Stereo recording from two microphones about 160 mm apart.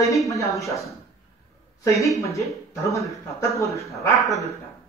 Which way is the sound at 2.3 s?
20° left (ahead or behind).